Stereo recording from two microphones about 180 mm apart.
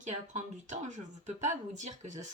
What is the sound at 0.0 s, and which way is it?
Speech, 40° right (ahead or behind).